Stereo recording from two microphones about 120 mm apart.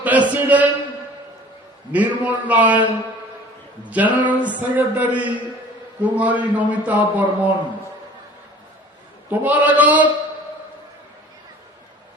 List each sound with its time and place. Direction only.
0.0 s a man's voice: 15° right (ahead or behind)
1.9 s a man's voice: 10° right (ahead or behind)
3.8 s a man's voice: 15° right (ahead or behind)
4.3 s a sound: 10° right (ahead or behind)
4.7 s a man's voice: 15° right (ahead or behind)
9.3 s a man's voice: 15° right (ahead or behind)